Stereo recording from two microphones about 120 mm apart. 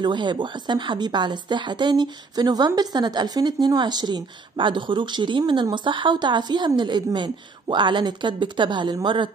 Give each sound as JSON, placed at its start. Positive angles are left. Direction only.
{"t": 0.0, "sound": "speech", "side_deg": -40}